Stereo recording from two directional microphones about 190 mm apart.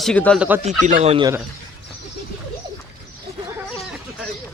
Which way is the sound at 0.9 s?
35° right (ahead or behind).